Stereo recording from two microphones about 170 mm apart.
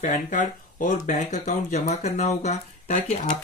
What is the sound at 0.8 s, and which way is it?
Speech, 45° left (ahead or behind).